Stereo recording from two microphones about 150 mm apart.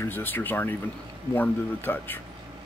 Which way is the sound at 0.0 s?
15° left (ahead or behind).